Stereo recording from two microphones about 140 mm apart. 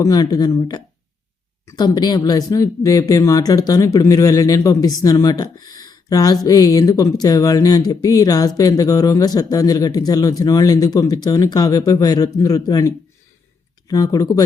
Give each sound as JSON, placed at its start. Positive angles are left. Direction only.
{"t": 0.0, "sound": "speech", "side_deg": 25}